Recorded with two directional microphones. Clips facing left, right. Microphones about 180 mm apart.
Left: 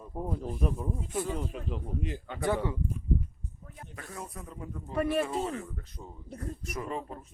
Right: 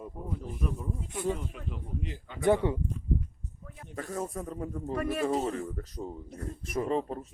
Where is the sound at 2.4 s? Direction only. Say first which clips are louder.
Right 5 dB; 20° right (ahead or behind).